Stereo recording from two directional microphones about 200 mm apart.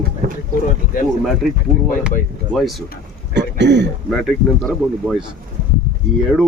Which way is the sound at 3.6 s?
60° right (ahead or behind).